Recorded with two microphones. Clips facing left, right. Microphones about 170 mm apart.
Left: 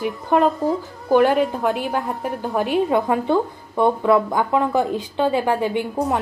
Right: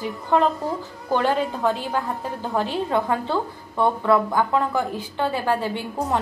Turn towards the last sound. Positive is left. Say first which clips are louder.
# left 4 dB
turn(degrees=15)  # may be behind; listen again after turning